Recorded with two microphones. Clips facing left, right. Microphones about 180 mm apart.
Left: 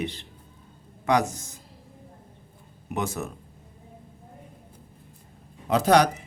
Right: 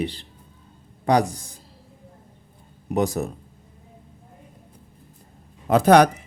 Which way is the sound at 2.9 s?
35° right (ahead or behind).